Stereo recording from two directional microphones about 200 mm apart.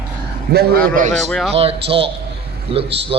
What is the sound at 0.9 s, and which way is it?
Speech, 40° right (ahead or behind).